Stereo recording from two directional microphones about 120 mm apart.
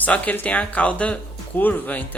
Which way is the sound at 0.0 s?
15° left (ahead or behind).